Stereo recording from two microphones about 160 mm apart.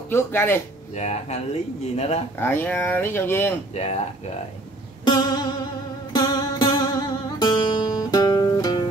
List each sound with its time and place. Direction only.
0.1 s speech: 15° left (ahead or behind)
0.9 s speech: 45° left (ahead or behind)
2.3 s speech: 15° left (ahead or behind)
3.7 s speech: 40° left (ahead or behind)
5.0 s music: 25° left (ahead or behind)